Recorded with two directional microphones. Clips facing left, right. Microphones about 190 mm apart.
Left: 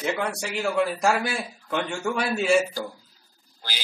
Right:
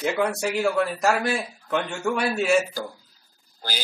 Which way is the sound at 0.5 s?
Centre (ahead or behind).